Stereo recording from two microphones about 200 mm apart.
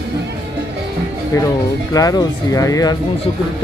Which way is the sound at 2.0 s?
15° left (ahead or behind).